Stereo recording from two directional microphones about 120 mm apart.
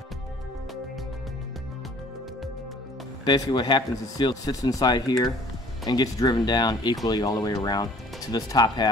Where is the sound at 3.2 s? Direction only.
40° left (ahead or behind).